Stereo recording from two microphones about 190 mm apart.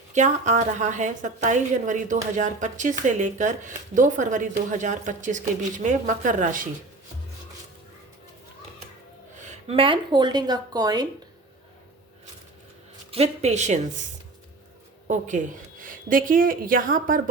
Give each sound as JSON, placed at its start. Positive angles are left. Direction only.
{"t": 0.1, "sound": "a woman's voice", "side_deg": -40}
{"t": 9.4, "sound": "speech", "side_deg": -30}
{"t": 13.1, "sound": "a woman's voice", "side_deg": -35}
{"t": 15.0, "sound": "speech", "side_deg": -40}